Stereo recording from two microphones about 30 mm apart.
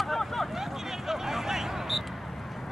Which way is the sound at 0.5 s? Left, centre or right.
Centre.